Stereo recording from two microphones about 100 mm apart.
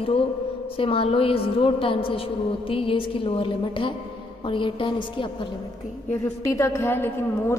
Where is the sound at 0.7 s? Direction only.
65° left (ahead or behind).